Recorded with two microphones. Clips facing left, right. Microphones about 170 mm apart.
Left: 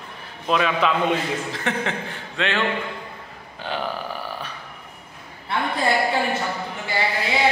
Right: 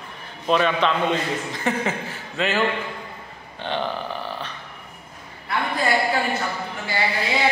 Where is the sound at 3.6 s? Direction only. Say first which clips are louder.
Right 2 dB; 5° left (ahead or behind).